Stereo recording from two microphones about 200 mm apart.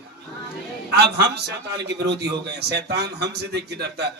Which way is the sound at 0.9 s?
55° right (ahead or behind).